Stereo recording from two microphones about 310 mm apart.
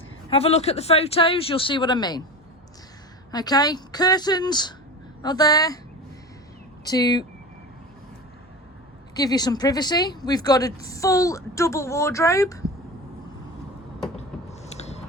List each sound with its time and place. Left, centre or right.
0.3 s speech: centre
3.3 s speech: centre
6.8 s speech: centre
9.1 s speech: centre
14.2 s a sound: left